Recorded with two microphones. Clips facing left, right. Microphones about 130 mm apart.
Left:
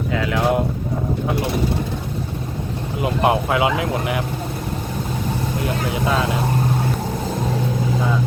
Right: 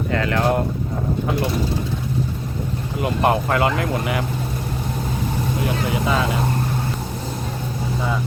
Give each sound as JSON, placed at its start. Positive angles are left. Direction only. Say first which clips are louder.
{"t": 0.1, "sound": "speech", "louder": "even", "side_deg": 5}
{"t": 3.0, "sound": "speech", "louder": "left 1 dB", "side_deg": 0}
{"t": 5.5, "sound": "speech", "louder": "right 1 dB", "side_deg": 0}